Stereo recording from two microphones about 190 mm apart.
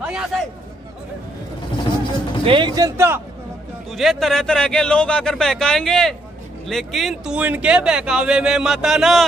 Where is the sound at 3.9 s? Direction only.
Centre (ahead or behind).